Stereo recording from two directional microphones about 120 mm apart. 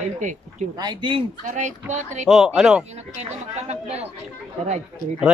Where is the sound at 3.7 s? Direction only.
60° right (ahead or behind).